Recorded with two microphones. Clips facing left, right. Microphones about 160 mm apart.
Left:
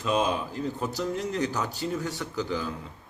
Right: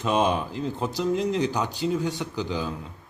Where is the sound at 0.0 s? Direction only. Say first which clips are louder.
Right 3 dB; 25° right (ahead or behind).